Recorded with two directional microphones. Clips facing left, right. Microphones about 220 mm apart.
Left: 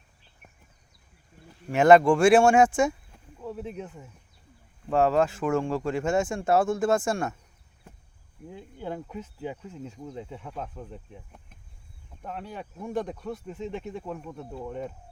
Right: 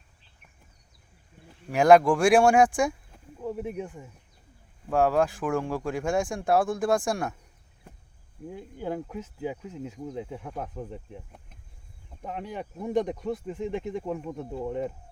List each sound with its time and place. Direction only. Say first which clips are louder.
1.7 s speech: left 1 dB; centre (ahead or behind)
3.4 s speech: right 3 dB; 15° right (ahead or behind)
8.5 s speech: right 3 dB; 10° right (ahead or behind)